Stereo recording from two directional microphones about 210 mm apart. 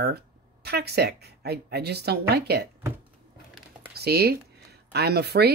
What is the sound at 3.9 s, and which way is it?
Speech, 50° right (ahead or behind).